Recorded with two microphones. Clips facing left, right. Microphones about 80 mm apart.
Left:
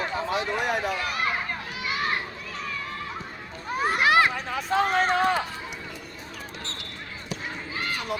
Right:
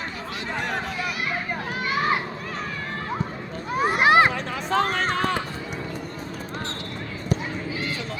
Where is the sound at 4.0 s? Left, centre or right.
Right.